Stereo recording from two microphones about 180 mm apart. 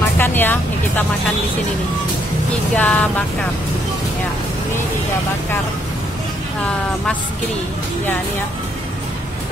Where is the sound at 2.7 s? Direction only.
10° left (ahead or behind).